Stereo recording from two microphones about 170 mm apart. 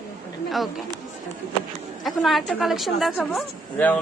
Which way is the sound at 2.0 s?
Centre (ahead or behind).